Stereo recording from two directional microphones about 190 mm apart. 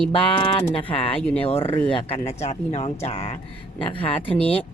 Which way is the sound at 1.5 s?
30° left (ahead or behind).